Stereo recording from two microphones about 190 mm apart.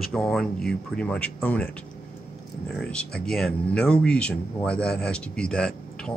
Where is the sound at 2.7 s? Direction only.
5° left (ahead or behind).